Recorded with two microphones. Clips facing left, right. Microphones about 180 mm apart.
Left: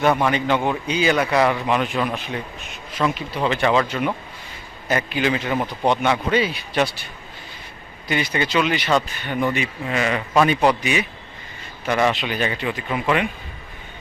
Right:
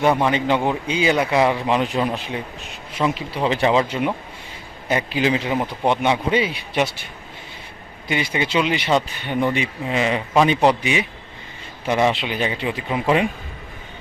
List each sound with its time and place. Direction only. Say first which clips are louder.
0.0 s a man's voice: right 1 dB; 20° right (ahead or behind)
8.0 s a man's voice: even; 25° right (ahead or behind)